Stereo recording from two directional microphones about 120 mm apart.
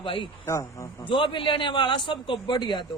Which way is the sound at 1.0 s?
45° left (ahead or behind).